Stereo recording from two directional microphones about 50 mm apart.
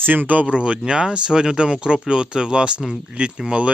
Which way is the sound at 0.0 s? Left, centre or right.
Right.